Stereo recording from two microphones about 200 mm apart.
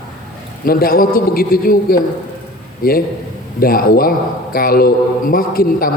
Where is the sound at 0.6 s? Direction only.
45° left (ahead or behind).